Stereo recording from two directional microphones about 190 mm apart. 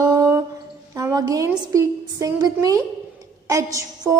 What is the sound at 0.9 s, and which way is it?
Speech, 20° right (ahead or behind).